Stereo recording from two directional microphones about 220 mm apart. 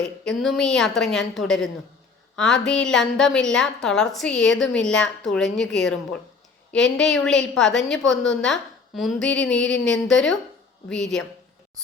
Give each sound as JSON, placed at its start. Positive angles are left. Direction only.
{"t": 0.3, "sound": "a woman's voice", "side_deg": 0}